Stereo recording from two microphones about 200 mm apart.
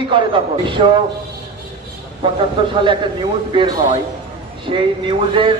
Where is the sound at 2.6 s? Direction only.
25° right (ahead or behind).